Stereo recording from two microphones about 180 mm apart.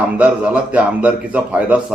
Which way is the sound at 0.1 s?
5° right (ahead or behind).